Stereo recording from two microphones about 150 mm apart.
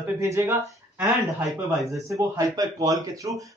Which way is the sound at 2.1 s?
20° right (ahead or behind).